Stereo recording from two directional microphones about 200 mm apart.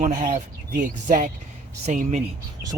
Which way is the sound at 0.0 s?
40° right (ahead or behind).